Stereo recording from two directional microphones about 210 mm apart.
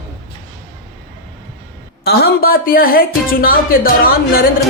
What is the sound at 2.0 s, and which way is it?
Speech, 50° left (ahead or behind).